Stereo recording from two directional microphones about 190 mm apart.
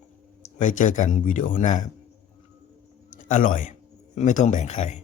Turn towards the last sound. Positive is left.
turn(degrees=35)  # may be behind; listen again after turning